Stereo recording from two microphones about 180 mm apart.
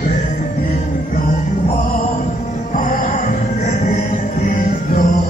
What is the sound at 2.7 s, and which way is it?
Music, 45° left (ahead or behind).